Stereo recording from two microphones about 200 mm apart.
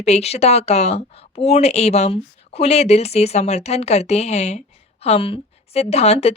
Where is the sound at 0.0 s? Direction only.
30° left (ahead or behind).